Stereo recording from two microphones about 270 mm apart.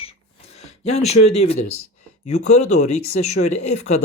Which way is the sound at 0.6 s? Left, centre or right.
Left.